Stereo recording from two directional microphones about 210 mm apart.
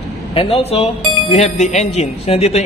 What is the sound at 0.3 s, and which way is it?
A man's voice, 30° left (ahead or behind).